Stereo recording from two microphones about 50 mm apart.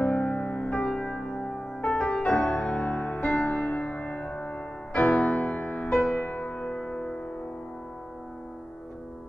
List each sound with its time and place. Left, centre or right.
0.0 s music: left
0.7 s music: centre
2.7 s music: left
5.4 s music: left
5.9 s music: centre
6.1 s music: left